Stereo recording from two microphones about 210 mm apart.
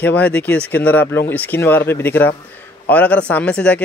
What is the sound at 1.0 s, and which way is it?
Speech, 50° left (ahead or behind).